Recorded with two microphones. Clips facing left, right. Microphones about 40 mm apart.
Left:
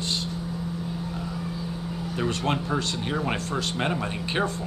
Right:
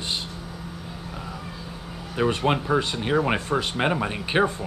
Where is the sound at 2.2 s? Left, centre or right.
Centre.